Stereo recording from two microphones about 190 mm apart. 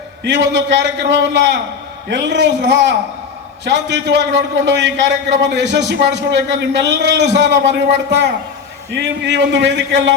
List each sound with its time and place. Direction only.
0.3 s a man's voice: 70° right (ahead or behind)